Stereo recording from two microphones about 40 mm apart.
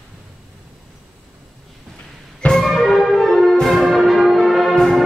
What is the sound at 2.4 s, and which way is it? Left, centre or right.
Music, centre.